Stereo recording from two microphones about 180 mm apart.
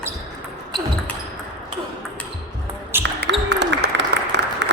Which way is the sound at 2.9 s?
10° right (ahead or behind).